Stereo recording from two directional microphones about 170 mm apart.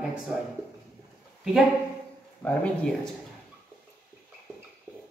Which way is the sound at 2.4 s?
10° left (ahead or behind).